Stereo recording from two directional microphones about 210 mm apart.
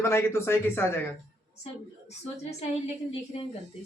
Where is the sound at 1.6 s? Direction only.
30° left (ahead or behind).